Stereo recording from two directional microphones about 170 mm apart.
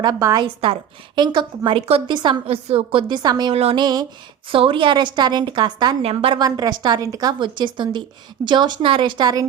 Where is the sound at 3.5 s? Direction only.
35° right (ahead or behind).